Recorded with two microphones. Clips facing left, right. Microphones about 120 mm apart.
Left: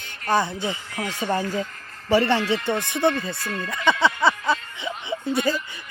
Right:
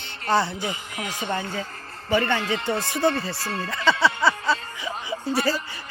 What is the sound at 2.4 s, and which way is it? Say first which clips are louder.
Speech: left 2 dB; 30° right (ahead or behind).